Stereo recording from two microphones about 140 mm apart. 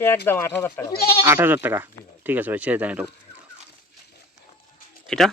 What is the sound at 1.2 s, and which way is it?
Speech, 15° right (ahead or behind).